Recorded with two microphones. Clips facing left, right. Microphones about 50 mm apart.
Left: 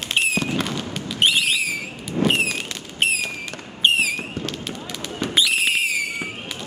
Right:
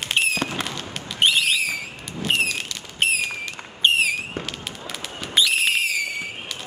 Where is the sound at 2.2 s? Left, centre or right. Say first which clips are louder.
Left 6 dB; left.